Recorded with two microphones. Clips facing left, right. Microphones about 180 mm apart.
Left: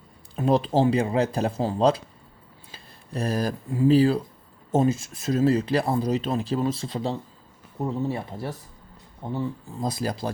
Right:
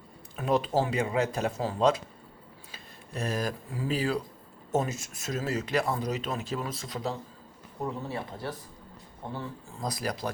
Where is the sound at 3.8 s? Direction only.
30° left (ahead or behind).